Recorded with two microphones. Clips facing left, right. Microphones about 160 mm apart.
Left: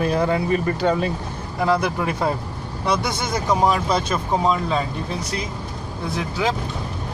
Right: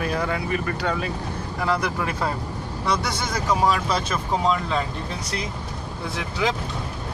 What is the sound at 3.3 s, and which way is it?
Speech, 20° left (ahead or behind).